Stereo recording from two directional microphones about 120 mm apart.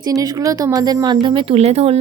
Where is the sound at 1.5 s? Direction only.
60° right (ahead or behind).